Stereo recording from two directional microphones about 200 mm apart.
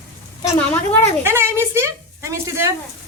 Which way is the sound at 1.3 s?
10° right (ahead or behind).